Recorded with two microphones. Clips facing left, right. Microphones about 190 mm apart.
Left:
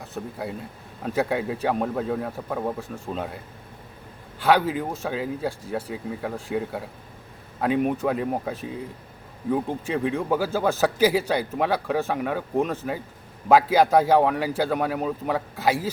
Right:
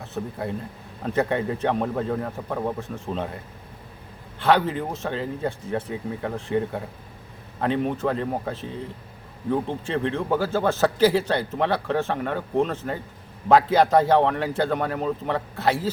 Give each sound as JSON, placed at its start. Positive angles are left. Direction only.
{"t": 0.0, "sound": "speech", "side_deg": 0}
{"t": 4.4, "sound": "a man's voice", "side_deg": 10}